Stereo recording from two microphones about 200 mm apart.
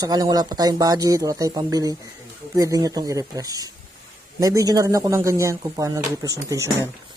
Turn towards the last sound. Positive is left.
turn(degrees=-15)  # may be behind; listen again after turning